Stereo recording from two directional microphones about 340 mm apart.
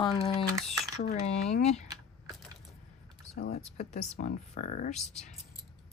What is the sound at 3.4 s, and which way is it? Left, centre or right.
Speech, left.